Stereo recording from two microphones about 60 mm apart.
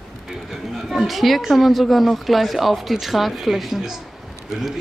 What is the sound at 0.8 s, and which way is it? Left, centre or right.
Speech, centre.